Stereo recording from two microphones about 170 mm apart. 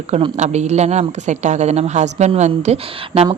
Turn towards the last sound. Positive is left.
turn(degrees=-35)  # may be behind; listen again after turning